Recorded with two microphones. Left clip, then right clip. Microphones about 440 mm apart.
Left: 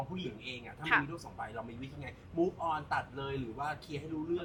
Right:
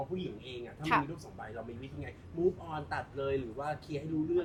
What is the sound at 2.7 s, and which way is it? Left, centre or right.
A man's voice, left.